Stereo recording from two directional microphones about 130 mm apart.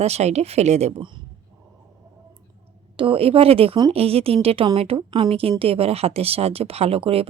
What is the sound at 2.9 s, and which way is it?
Speech, 45° right (ahead or behind).